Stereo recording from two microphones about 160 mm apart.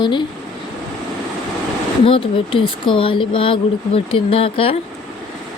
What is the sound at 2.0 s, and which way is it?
Speech, 35° left (ahead or behind).